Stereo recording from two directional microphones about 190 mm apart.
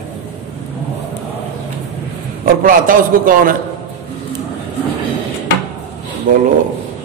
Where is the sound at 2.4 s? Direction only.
45° right (ahead or behind).